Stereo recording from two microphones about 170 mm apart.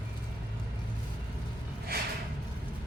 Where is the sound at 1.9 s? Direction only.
65° right (ahead or behind).